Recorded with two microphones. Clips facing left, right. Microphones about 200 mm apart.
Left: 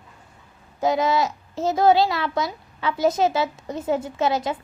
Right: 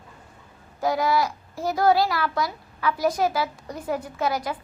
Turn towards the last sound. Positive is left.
turn(degrees=25)  # may be behind; listen again after turning